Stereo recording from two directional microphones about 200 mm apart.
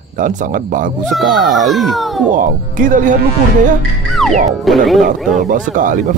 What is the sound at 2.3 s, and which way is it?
Speech, 40° right (ahead or behind).